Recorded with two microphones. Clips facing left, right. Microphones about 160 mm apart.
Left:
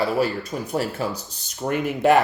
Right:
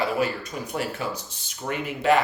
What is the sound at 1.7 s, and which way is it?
Speech, 45° left (ahead or behind).